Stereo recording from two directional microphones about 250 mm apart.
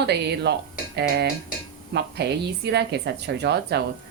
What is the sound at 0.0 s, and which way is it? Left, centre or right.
Speech, right.